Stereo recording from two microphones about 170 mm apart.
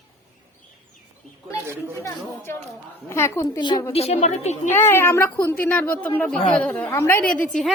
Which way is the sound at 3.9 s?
35° left (ahead or behind).